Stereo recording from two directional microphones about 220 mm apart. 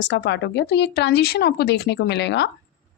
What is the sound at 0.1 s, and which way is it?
Speech, 50° left (ahead or behind).